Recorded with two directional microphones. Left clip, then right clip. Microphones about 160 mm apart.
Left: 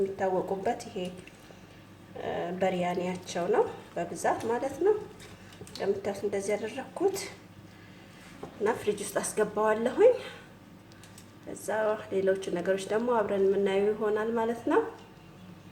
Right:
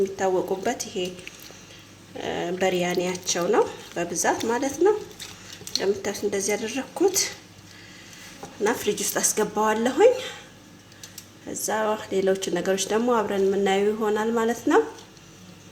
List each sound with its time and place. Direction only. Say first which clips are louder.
0.2 s speech: right 5 dB; 50° right (ahead or behind)
2.2 s speech: right 5 dB; 50° right (ahead or behind)
5.8 s speech: right 4 dB; 50° right (ahead or behind)
8.6 s a woman's voice: right 5 dB; 40° right (ahead or behind)
11.5 s a woman's voice: right 4 dB; 40° right (ahead or behind)